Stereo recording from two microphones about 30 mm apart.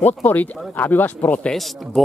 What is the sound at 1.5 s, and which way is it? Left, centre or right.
Speech, centre.